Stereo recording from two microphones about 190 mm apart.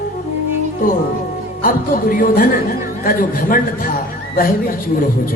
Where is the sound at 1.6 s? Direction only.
45° left (ahead or behind).